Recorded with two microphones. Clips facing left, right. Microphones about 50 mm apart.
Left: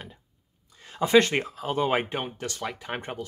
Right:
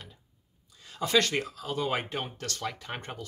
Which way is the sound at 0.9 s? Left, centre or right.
Left.